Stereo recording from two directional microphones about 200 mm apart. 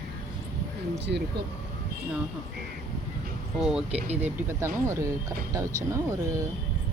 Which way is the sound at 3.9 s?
30° right (ahead or behind).